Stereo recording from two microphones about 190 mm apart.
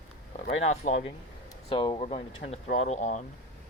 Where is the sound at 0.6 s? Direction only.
35° left (ahead or behind).